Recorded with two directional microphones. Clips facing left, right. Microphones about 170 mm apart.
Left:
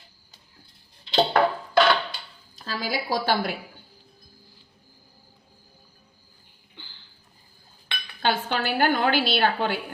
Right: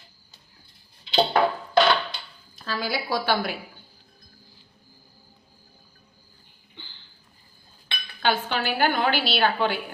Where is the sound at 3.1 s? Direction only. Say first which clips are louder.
Left 1 dB; 45° left (ahead or behind).